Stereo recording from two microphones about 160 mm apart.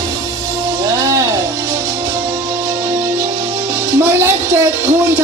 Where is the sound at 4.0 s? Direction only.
15° right (ahead or behind).